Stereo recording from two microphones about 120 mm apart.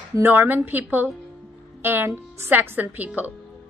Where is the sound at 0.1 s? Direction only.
20° right (ahead or behind).